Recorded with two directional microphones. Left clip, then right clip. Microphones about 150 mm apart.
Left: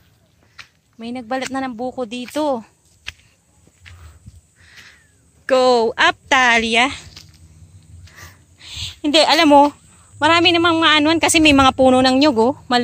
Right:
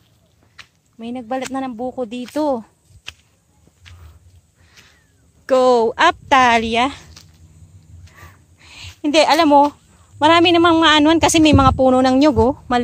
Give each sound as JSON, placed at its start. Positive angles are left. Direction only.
{"t": 0.9, "sound": "speech", "side_deg": -15}
{"t": 2.3, "sound": "a woman's voice", "side_deg": -25}
{"t": 3.1, "sound": "a sound", "side_deg": 0}
{"t": 4.6, "sound": "a sound", "side_deg": 0}
{"t": 5.5, "sound": "speech", "side_deg": -20}
{"t": 8.1, "sound": "a sound", "side_deg": -5}
{"t": 9.5, "sound": "speech", "side_deg": 10}
{"t": 10.1, "sound": "a woman's voice", "side_deg": -30}
{"t": 11.5, "sound": "speech", "side_deg": 5}
{"t": 12.0, "sound": "speech", "side_deg": -15}